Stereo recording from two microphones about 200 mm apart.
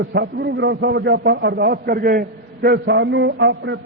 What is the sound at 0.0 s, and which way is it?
A man's voice, 55° right (ahead or behind).